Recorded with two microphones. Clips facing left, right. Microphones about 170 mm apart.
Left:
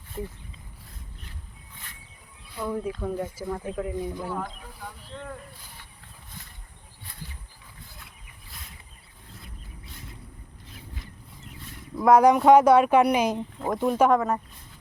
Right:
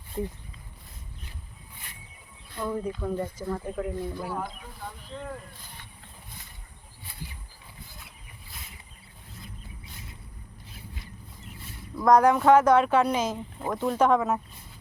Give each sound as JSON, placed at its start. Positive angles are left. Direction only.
{"t": 2.6, "sound": "speech", "side_deg": 5}
{"t": 3.9, "sound": "speech", "side_deg": 15}
{"t": 4.2, "sound": "speech", "side_deg": -5}
{"t": 11.9, "sound": "speech", "side_deg": 10}
{"t": 14.2, "sound": "speech", "side_deg": -5}